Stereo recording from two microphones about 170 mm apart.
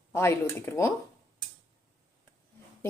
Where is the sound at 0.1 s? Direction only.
15° left (ahead or behind).